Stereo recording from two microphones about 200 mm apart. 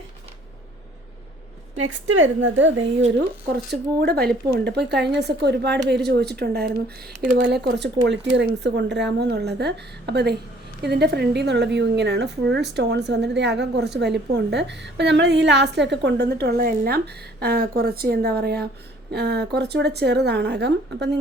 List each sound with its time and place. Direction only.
1.7 s a woman's voice: 75° right (ahead or behind)
4.0 s speech: 50° right (ahead or behind)
8.0 s speech: 60° right (ahead or behind)